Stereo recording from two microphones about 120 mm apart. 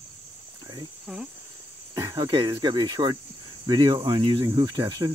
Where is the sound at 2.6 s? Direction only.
35° right (ahead or behind).